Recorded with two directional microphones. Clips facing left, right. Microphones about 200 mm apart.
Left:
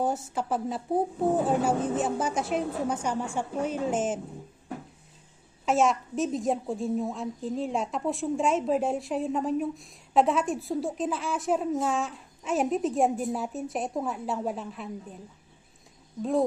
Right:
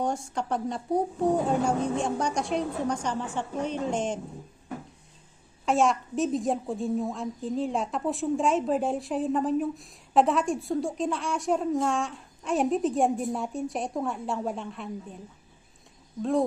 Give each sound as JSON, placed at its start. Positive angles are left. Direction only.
{"t": 0.0, "sound": "a woman's voice", "side_deg": 5}
{"t": 5.6, "sound": "a woman's voice", "side_deg": 0}
{"t": 16.2, "sound": "a woman's voice", "side_deg": 0}